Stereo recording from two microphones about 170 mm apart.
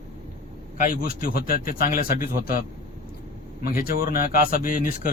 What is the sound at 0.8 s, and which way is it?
Speech, 55° left (ahead or behind).